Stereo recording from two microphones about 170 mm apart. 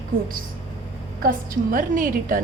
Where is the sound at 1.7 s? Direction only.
50° right (ahead or behind).